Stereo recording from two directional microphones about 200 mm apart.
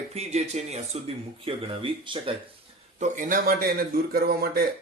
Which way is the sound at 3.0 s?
40° right (ahead or behind).